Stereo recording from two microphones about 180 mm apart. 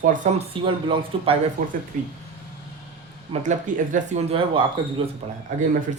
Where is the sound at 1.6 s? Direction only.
50° right (ahead or behind).